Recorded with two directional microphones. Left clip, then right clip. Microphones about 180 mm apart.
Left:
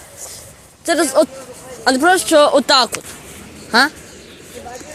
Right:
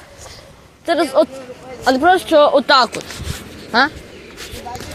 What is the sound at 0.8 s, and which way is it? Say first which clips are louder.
Speech: even; 40° left (ahead or behind).